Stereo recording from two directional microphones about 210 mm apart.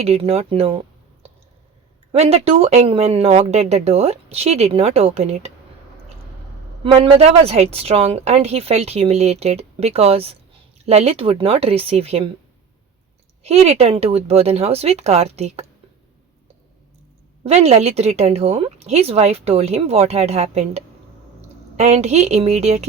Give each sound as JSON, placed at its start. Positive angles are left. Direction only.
{"t": 0.0, "sound": "a woman's voice", "side_deg": -30}
{"t": 2.1, "sound": "a woman's voice", "side_deg": -30}
{"t": 6.8, "sound": "a woman's voice", "side_deg": -25}
{"t": 13.4, "sound": "a woman's voice", "side_deg": -30}
{"t": 17.4, "sound": "a woman's voice", "side_deg": -30}